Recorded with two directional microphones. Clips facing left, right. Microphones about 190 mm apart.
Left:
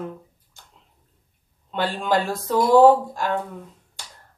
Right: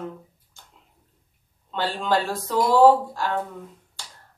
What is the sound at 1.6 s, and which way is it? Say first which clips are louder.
Speech: left 1 dB; 15° left (ahead or behind).